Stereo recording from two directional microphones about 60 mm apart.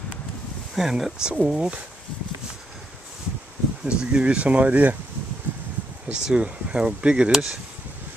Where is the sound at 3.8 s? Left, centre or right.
Centre.